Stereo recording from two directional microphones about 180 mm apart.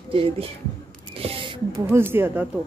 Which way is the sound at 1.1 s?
30° right (ahead or behind).